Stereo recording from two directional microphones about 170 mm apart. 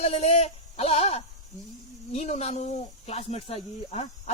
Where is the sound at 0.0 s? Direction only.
40° left (ahead or behind).